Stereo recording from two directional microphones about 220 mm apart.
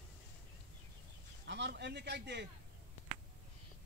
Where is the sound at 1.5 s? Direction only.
50° right (ahead or behind).